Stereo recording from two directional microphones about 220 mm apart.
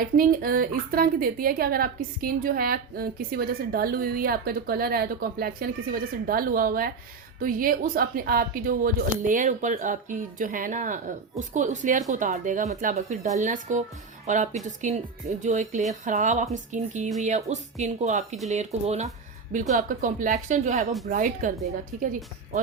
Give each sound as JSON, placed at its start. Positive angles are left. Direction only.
{"t": 0.0, "sound": "a woman's voice", "side_deg": -40}